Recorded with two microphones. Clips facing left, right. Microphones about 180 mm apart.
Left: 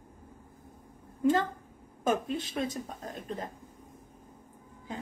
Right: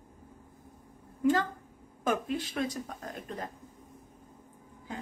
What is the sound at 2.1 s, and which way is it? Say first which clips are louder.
Speech: left 1 dB; 25° left (ahead or behind).